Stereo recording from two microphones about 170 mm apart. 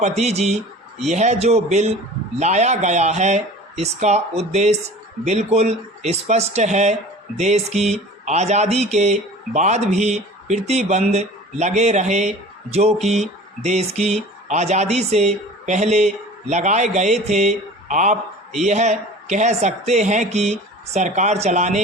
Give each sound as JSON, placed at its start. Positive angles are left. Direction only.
{"t": 0.0, "sound": "speech", "side_deg": -40}